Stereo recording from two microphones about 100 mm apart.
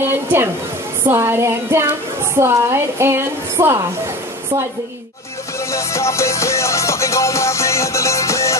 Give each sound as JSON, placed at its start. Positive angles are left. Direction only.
{"t": 0.1, "sound": "a woman's voice", "side_deg": -20}
{"t": 5.7, "sound": "music", "side_deg": 30}